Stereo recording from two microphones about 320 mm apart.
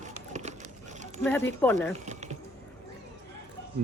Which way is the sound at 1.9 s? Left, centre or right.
Right.